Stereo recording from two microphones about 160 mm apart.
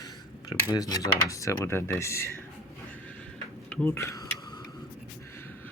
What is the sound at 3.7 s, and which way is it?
Speech, 15° left (ahead or behind).